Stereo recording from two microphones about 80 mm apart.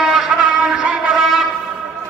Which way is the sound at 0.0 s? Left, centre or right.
Centre.